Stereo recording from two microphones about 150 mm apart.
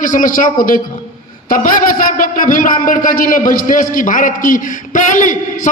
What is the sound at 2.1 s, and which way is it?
A man's voice, 65° left (ahead or behind).